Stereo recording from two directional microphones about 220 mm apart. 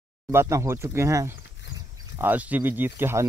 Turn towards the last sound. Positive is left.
turn(degrees=-10)  # may be behind; listen again after turning